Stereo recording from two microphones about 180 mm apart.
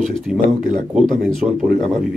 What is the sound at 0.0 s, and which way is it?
A man's voice, centre (ahead or behind).